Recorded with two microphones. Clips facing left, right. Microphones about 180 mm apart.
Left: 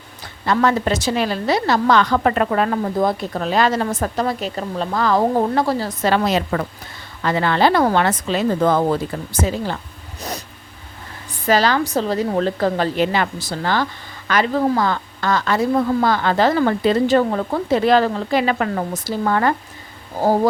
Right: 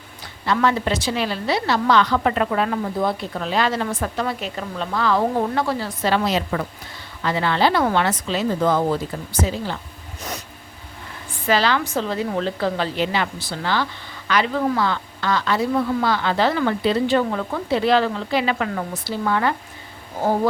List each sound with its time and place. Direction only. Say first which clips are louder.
0.4 s a woman's voice: left 3 dB; 45° left (ahead or behind)
10.2 s a sound: left 3 dB; 35° left (ahead or behind)
11.4 s a woman's voice: left 3 dB; 45° left (ahead or behind)